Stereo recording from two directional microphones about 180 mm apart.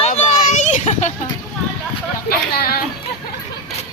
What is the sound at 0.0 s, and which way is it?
Children playing, 40° left (ahead or behind).